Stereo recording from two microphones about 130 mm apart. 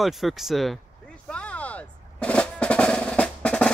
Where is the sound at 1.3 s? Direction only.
10° left (ahead or behind).